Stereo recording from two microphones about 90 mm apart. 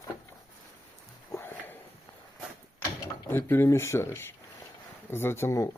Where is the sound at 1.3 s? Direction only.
25° left (ahead or behind).